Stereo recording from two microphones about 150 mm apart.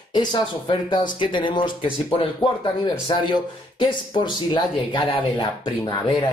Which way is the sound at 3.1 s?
35° left (ahead or behind).